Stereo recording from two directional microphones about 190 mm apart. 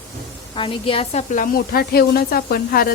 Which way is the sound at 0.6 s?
30° left (ahead or behind).